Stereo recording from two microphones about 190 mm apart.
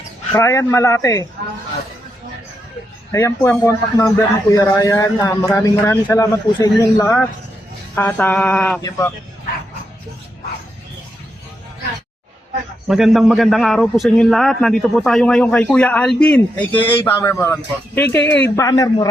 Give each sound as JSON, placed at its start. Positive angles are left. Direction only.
{"t": 0.3, "sound": "a man's voice", "side_deg": 15}
{"t": 3.1, "sound": "a man's voice", "side_deg": 15}
{"t": 8.8, "sound": "a man's voice", "side_deg": 15}
{"t": 12.9, "sound": "a man's voice", "side_deg": 0}